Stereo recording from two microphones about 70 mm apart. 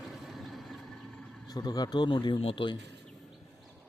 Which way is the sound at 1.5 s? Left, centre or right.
Left.